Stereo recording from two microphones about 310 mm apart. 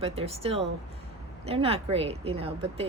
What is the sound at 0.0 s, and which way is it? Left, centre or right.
A woman's voice, centre.